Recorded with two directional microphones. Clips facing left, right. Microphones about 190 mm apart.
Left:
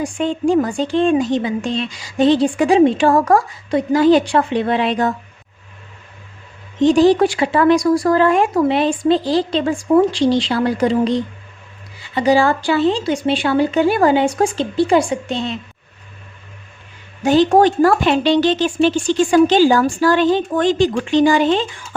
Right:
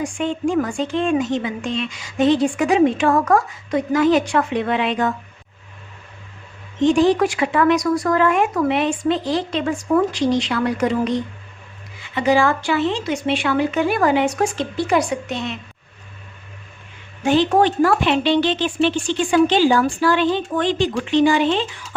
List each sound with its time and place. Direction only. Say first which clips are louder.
0.0 s speech: left 3 dB; 35° left (ahead or behind)
6.7 s speech: left 3 dB; 35° left (ahead or behind)
17.2 s speech: left 4 dB; 40° left (ahead or behind)